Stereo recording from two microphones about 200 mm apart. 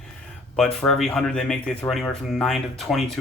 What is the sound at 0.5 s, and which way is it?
Speech, centre (ahead or behind).